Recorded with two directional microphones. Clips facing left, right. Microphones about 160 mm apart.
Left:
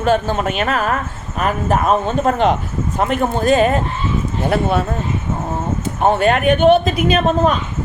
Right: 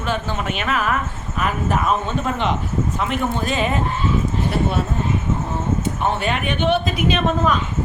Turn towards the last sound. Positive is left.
turn(degrees=45)  # may be behind; listen again after turning